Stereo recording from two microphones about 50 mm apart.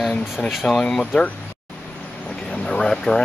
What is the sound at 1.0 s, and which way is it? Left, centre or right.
Speech, left.